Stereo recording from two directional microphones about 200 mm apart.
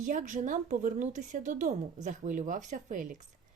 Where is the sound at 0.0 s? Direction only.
40° right (ahead or behind).